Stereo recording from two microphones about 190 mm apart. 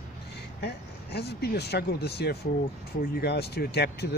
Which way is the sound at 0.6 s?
60° left (ahead or behind).